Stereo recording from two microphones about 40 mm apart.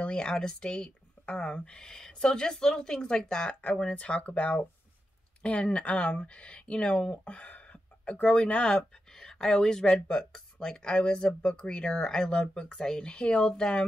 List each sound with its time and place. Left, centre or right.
0.0 s speech: left
3.6 s speech: left
12.3 s speech: left